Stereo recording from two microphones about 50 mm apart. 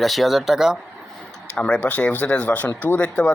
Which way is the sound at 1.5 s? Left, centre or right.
Left.